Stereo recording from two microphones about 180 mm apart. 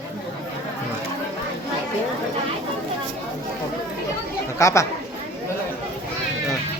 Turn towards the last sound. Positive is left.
turn(degrees=15)  # may be behind; listen again after turning